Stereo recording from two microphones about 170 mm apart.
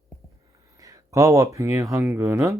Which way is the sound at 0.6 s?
20° right (ahead or behind).